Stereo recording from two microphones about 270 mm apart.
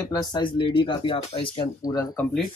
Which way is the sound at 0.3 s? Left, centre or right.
Centre.